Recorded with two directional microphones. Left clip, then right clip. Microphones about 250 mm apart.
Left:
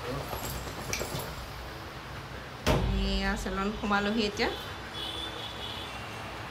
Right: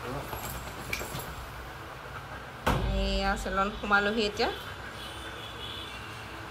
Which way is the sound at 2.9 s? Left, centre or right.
Centre.